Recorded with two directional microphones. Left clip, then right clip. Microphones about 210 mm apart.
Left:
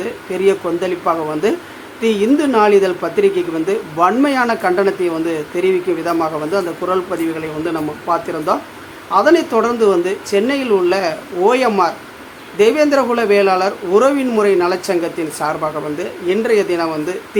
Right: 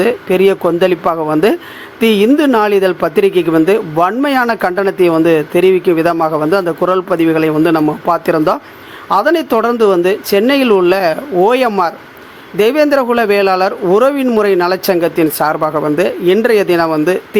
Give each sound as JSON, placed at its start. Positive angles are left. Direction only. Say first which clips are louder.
{"t": 0.0, "sound": "speech", "louder": "right 6 dB", "side_deg": -35}